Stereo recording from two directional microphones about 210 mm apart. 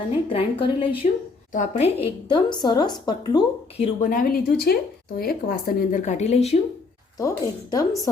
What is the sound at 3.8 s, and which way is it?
Speech, 40° left (ahead or behind).